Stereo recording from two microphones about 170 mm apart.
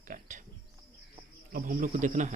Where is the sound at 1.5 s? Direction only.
55° right (ahead or behind).